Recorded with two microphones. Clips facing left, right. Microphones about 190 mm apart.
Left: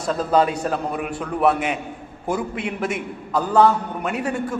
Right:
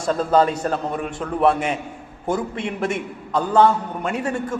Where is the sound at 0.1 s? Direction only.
5° left (ahead or behind).